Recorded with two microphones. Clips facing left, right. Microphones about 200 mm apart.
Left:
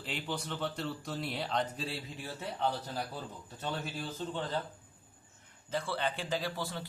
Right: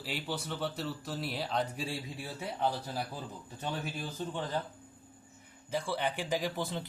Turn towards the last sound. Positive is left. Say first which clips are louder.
# right 2 dB
turn(degrees=-20)  # may be behind; listen again after turning